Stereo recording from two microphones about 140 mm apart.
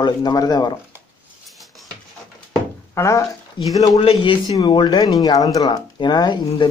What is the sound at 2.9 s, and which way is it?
Speech, 20° left (ahead or behind).